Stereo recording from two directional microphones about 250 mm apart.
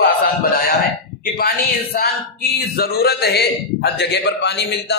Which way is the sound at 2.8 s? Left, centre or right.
Left.